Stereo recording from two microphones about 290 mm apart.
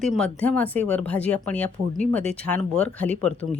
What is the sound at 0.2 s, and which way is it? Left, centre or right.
A woman's voice, centre.